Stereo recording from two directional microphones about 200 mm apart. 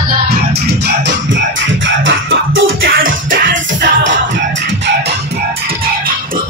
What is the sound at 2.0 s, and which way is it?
Music, 70° right (ahead or behind).